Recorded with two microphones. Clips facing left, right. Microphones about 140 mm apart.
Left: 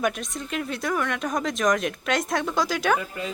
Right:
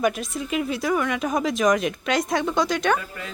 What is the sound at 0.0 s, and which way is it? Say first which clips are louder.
Speech: right 3 dB; 5° right (ahead or behind).